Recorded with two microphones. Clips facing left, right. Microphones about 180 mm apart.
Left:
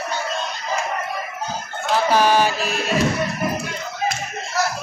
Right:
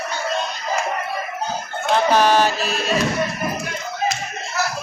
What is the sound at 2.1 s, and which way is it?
Chant, 10° left (ahead or behind).